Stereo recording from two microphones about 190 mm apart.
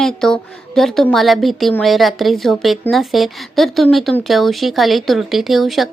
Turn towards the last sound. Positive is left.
turn(degrees=0)  # may be behind; listen again after turning